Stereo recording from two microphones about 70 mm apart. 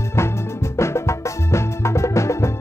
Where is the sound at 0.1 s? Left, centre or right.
Left.